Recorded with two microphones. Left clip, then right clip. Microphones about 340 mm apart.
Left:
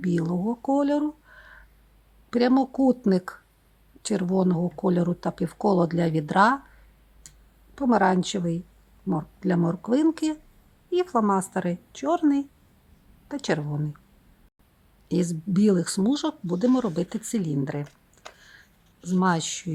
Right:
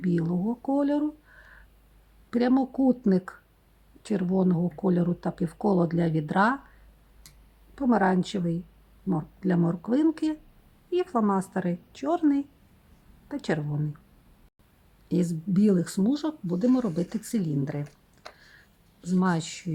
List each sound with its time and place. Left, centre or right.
0.0 s speech: centre
7.8 s speech: centre
15.1 s speech: centre
17.8 s a sound: centre
19.0 s speech: centre